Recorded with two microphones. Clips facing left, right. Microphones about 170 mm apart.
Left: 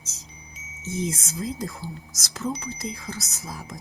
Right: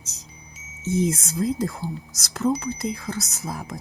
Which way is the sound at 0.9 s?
60° right (ahead or behind).